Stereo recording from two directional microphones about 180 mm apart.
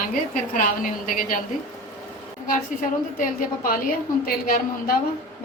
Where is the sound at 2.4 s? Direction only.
50° left (ahead or behind).